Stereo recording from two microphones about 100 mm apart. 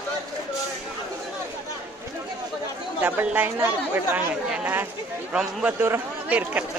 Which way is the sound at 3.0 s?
15° right (ahead or behind).